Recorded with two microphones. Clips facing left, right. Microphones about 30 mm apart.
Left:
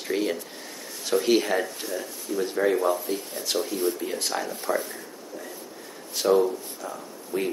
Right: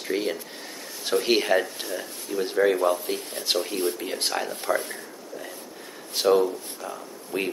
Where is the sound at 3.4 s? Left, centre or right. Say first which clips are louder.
Right 3 dB; right.